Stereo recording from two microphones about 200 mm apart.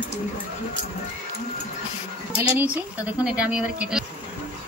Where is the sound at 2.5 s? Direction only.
5° right (ahead or behind).